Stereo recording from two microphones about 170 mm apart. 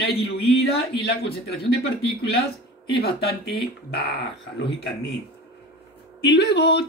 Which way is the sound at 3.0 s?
65° left (ahead or behind).